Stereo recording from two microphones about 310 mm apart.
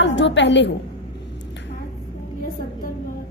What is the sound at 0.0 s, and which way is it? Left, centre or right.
Speech, left.